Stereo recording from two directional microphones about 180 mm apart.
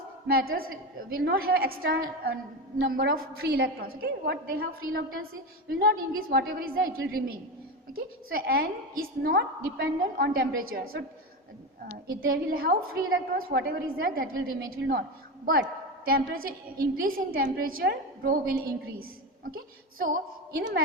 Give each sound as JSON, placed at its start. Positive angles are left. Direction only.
{"t": 0.3, "sound": "a woman's voice", "side_deg": -55}
{"t": 12.0, "sound": "a woman's voice", "side_deg": -55}
{"t": 16.0, "sound": "a woman's voice", "side_deg": -55}